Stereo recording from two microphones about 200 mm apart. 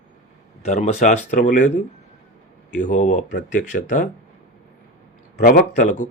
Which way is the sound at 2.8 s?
40° left (ahead or behind).